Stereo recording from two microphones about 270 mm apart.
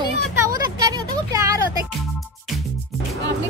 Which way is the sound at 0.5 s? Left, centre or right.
Centre.